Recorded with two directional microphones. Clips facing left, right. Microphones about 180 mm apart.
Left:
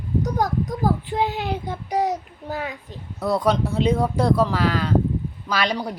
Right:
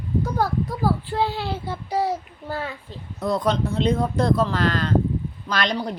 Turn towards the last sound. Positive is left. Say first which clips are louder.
# left 1 dB
turn(degrees=10)  # may be behind; listen again after turning